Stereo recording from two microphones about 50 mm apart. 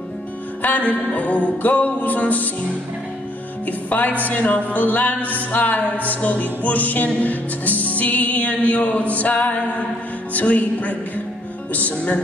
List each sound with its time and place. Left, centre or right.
0.6 s music: left
3.6 s speech: left
4.2 s music: left
10.3 s a woman's voice: left